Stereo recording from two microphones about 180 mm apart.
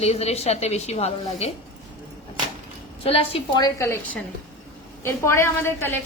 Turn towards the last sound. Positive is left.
turn(degrees=15)  # may be behind; listen again after turning